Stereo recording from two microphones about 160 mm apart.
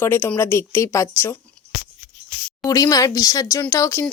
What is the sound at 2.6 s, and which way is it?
Speech, 20° left (ahead or behind).